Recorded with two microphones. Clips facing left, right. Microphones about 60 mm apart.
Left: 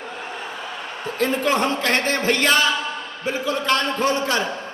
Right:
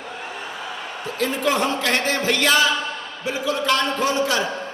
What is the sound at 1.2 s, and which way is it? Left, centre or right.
Speech, left.